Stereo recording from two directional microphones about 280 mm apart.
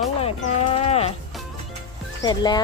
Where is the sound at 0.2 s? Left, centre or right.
Left.